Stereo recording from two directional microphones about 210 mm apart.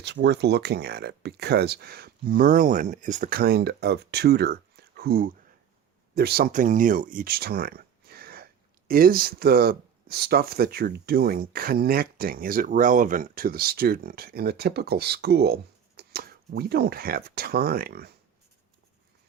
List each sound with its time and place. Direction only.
0.0 s speech: 55° right (ahead or behind)